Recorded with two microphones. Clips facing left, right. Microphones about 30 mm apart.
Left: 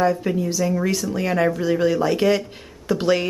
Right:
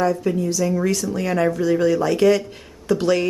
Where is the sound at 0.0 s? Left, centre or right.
Centre.